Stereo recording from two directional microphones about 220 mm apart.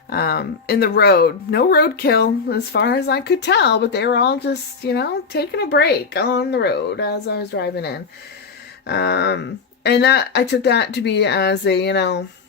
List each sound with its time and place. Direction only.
0.1 s speech: 45° left (ahead or behind)